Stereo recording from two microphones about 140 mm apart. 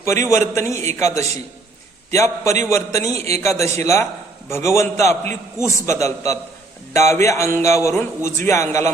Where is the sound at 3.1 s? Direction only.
50° right (ahead or behind).